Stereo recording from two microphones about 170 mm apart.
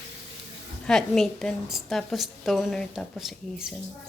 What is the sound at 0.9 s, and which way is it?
A woman's voice, centre (ahead or behind).